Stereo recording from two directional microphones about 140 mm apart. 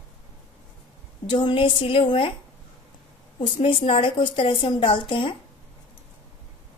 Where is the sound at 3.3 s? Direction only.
35° left (ahead or behind).